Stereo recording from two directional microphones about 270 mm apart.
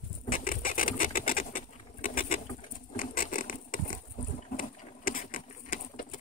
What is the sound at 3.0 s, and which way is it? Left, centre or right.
Mechanisms, left.